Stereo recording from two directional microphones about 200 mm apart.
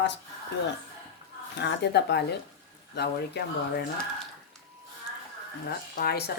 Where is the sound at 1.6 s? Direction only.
60° left (ahead or behind).